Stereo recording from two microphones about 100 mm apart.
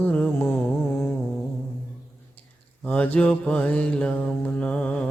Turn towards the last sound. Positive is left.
turn(degrees=10)  # may be behind; listen again after turning